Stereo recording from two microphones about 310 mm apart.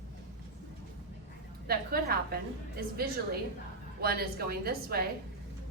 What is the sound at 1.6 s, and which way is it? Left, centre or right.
A woman's voice, right.